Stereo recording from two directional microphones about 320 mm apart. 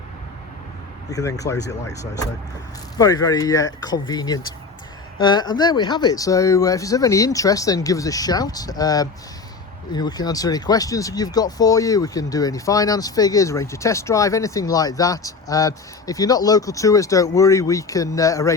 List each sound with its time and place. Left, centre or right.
1.1 s speech: centre